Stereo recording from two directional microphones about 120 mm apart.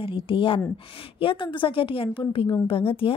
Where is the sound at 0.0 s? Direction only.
45° left (ahead or behind).